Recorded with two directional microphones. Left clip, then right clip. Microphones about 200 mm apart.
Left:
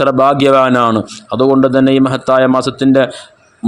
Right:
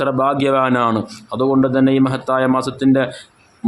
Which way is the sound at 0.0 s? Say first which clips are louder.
Left 7 dB; 25° left (ahead or behind).